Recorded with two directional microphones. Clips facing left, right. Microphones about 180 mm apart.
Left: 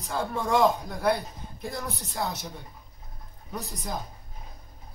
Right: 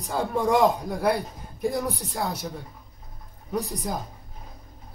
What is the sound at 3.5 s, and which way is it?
Speech, 10° right (ahead or behind).